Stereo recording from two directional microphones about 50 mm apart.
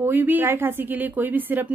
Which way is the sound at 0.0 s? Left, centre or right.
Right.